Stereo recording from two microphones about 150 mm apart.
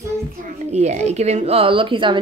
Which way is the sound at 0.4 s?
50° right (ahead or behind).